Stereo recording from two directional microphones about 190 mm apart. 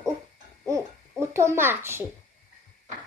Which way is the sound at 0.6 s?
15° right (ahead or behind).